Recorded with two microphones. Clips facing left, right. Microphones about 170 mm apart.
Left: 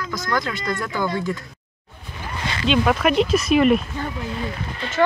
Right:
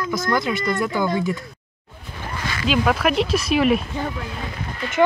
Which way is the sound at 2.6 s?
5° right (ahead or behind).